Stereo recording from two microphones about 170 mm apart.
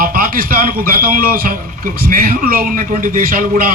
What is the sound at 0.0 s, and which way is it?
A man's voice, 55° right (ahead or behind).